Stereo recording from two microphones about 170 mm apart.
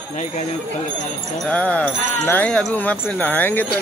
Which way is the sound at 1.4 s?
5° left (ahead or behind).